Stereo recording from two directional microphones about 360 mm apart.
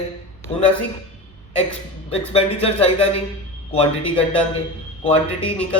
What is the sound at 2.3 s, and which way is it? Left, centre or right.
Speech, centre.